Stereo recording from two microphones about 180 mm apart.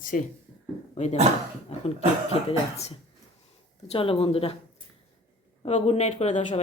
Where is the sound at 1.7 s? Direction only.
35° left (ahead or behind).